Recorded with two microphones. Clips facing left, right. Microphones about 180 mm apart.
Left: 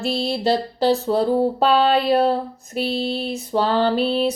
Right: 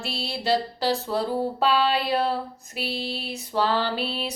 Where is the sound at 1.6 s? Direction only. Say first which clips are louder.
Left 3 dB; 50° left (ahead or behind).